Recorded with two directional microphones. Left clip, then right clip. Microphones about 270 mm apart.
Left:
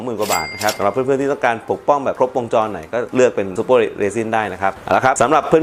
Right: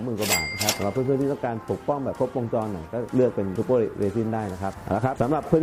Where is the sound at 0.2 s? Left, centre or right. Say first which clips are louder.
Left 6 dB; centre.